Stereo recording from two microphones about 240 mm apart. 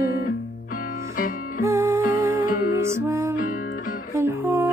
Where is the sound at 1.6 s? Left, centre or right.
Centre.